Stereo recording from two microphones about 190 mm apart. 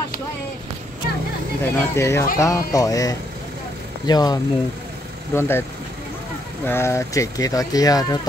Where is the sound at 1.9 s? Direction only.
15° left (ahead or behind).